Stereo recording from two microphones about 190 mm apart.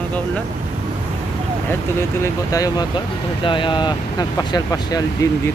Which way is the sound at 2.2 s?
20° left (ahead or behind).